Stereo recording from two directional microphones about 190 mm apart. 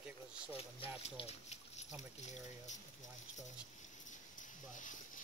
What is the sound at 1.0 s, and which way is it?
Speech, 35° left (ahead or behind).